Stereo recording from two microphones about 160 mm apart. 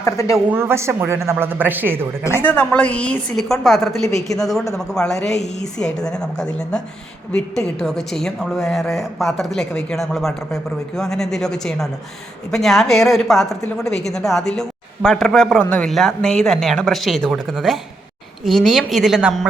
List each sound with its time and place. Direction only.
0.0 s speech: 20° left (ahead or behind)
0.5 s speech: 15° right (ahead or behind)
2.4 s a woman's voice: 10° left (ahead or behind)
4.0 s speech: 20° left (ahead or behind)
4.4 s a woman's voice: centre (ahead or behind)